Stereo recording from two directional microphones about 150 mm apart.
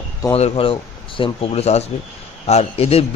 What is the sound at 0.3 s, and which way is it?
A man's voice, 40° left (ahead or behind).